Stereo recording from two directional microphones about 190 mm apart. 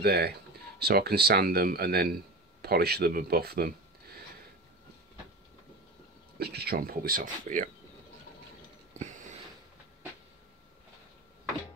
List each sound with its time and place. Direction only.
0.0 s speech: 55° right (ahead or behind)
6.3 s speech: 55° right (ahead or behind); by 7.7 s 40° right (ahead or behind)